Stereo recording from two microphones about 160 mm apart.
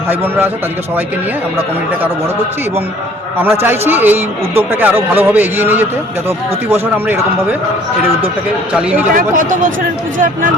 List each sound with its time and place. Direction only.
0.1 s a man's voice: 15° right (ahead or behind)
3.3 s a man's voice: 15° right (ahead or behind)
9.1 s speech: 55° right (ahead or behind)